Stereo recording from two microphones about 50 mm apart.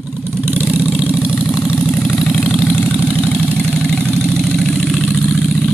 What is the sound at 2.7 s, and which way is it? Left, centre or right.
Vehicle, left.